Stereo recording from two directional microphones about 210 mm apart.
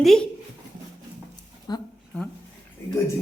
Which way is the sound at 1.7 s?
20° left (ahead or behind).